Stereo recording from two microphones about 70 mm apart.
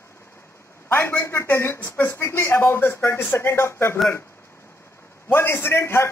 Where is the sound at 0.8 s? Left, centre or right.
Left.